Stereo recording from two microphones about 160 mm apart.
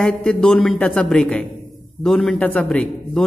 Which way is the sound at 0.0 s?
5° left (ahead or behind).